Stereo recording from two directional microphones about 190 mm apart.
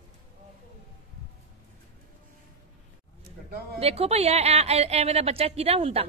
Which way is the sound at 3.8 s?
35° right (ahead or behind).